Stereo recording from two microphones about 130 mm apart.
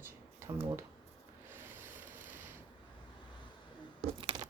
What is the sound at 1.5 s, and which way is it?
Rub, 15° right (ahead or behind).